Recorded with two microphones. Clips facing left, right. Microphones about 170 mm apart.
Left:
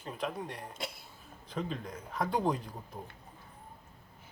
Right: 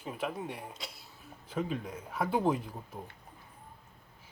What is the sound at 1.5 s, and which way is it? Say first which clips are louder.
Speech: right 3 dB; 5° right (ahead or behind).